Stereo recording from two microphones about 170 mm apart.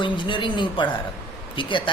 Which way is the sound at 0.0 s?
30° left (ahead or behind).